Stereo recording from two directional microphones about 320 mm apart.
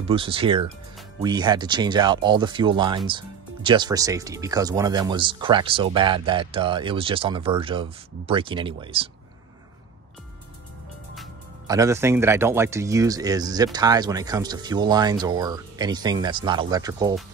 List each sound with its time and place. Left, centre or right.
0.0 s speech: centre
11.6 s speech: centre